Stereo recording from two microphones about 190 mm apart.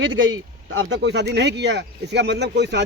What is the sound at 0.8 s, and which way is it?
Speech, 75° right (ahead or behind).